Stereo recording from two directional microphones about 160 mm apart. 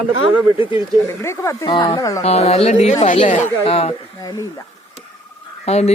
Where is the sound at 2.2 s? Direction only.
40° left (ahead or behind).